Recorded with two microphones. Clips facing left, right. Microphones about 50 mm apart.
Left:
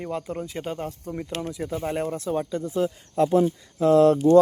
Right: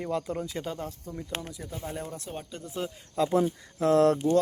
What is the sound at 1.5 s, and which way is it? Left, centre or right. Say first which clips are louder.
Speech: left 10 dB; left.